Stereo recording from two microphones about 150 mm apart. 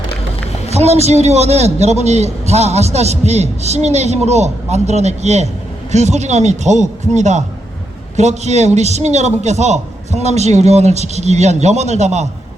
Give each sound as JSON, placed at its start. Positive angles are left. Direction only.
{"t": 0.7, "sound": "a man's voice", "side_deg": -45}